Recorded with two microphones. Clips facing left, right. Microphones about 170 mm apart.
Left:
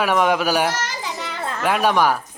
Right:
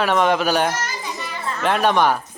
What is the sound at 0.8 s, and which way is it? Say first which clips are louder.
Children playing: left 1 dB; 90° left.